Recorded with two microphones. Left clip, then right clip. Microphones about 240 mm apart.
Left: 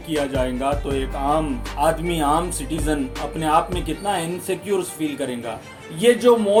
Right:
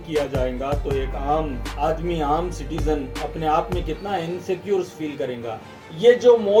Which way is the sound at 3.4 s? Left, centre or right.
Left.